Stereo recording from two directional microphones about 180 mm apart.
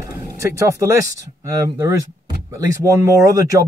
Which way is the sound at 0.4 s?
15° right (ahead or behind).